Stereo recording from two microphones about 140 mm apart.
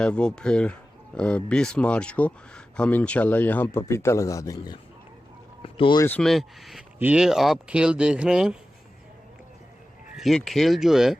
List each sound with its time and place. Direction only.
0.0 s speech: 5° left (ahead or behind); by 4.8 s 25° left (ahead or behind)
5.6 s speech: 40° left (ahead or behind)
6.1 s speech: 5° left (ahead or behind)
10.2 s speech: centre (ahead or behind)